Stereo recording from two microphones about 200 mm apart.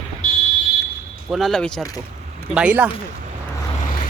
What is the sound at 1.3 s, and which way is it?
Speech, centre (ahead or behind).